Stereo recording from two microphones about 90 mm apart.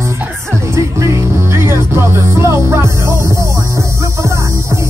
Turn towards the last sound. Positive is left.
turn(degrees=-30)  # may be behind; listen again after turning